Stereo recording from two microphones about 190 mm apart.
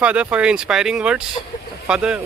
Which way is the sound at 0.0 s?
5° right (ahead or behind).